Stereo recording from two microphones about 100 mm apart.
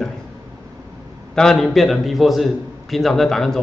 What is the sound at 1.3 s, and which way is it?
A man's voice, 5° left (ahead or behind).